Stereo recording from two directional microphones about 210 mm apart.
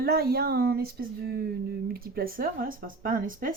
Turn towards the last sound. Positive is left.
turn(degrees=-40)  # may be behind; listen again after turning